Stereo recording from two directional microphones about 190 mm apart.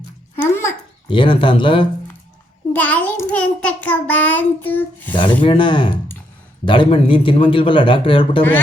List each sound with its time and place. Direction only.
0.3 s a child's voice: 10° left (ahead or behind)
1.1 s speech: 25° left (ahead or behind)
2.7 s child singing: 10° left (ahead or behind)
5.1 s speech: 25° left (ahead or behind)